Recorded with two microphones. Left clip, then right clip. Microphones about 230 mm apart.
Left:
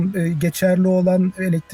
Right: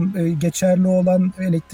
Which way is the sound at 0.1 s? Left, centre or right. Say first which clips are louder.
Right 1 dB; centre.